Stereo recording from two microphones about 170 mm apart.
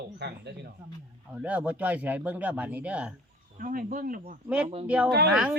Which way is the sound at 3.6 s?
55° right (ahead or behind).